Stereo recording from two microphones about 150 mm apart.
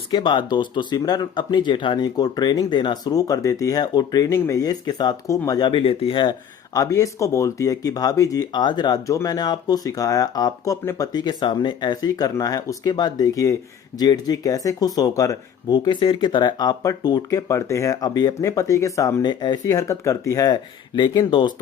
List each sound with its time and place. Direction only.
0.1 s speech: 30° left (ahead or behind)
6.7 s speech: 20° left (ahead or behind)